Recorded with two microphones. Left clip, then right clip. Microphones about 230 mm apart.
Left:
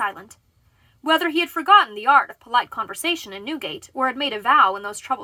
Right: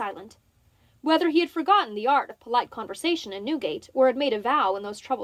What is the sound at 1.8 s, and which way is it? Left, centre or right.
Speech, left.